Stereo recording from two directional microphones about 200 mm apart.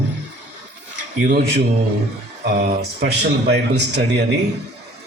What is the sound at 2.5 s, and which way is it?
A man's voice, 50° right (ahead or behind).